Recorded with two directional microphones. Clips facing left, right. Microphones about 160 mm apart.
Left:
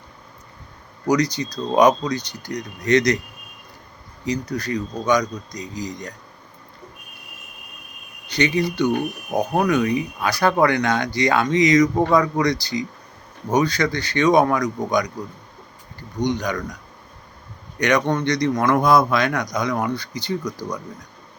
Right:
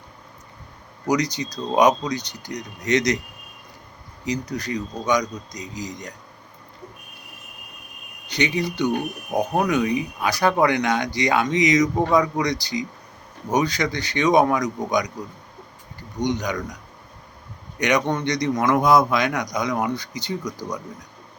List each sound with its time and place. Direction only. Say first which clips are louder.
1.0 s a man's voice: left 3 dB; 15° right (ahead or behind)
4.3 s a man's voice: left 2 dB; 15° right (ahead or behind)
8.3 s a man's voice: left 3 dB; 15° right (ahead or behind)
9.3 s speech: left 1 dB; 5° left (ahead or behind)
9.6 s a man's voice: left 2 dB; 15° right (ahead or behind)
16.2 s a man's voice: left 1 dB; 15° right (ahead or behind)
17.7 s a man's voice: left 2 dB; 15° right (ahead or behind)